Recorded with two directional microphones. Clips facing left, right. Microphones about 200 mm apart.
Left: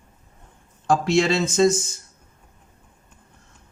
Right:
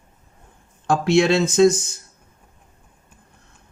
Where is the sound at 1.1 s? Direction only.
60° right (ahead or behind).